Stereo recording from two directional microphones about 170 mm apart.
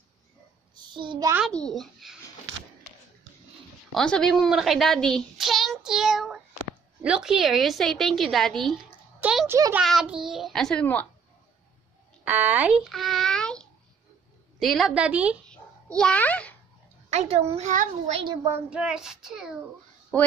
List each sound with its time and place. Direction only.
0.7 s a child's voice: 30° right (ahead or behind)
1.5 s a child's voice: 5° left (ahead or behind)
3.9 s a child's voice: 5° left (ahead or behind)
9.5 s a child's voice: 15° right (ahead or behind)
9.8 s a child's voice: 5° right (ahead or behind)
12.3 s a child's voice: 10° right (ahead or behind)
15.4 s a sound: 5° left (ahead or behind)
17.1 s a woman's voice: 40° right (ahead or behind)
18.2 s speech: 25° right (ahead or behind)
18.5 s a child's voice: 5° right (ahead or behind)